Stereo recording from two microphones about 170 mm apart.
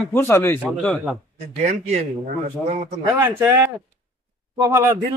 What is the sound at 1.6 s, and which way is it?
Speech, 45° right (ahead or behind).